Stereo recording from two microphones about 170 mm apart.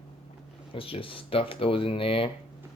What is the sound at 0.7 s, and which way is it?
Speech, 30° left (ahead or behind).